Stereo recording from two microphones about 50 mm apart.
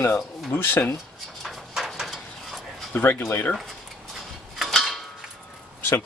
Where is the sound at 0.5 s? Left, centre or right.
Left.